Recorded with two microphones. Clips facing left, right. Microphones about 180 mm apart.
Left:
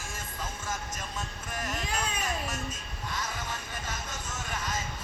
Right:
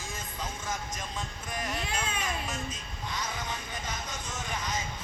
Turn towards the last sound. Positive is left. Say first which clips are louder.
# right 1 dB
turn(degrees=-15)  # may be behind; listen again after turning